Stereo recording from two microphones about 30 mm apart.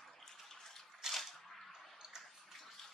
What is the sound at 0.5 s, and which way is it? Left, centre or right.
Water, centre.